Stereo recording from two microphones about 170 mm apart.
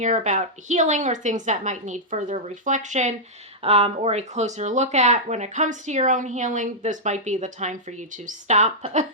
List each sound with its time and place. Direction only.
0.0 s speech: 45° right (ahead or behind)